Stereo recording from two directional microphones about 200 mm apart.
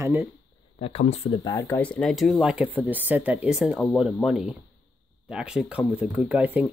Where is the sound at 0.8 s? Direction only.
30° left (ahead or behind).